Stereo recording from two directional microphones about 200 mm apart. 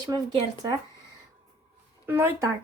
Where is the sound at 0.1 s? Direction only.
15° right (ahead or behind).